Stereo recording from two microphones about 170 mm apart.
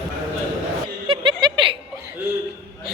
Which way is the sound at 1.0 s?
30° right (ahead or behind).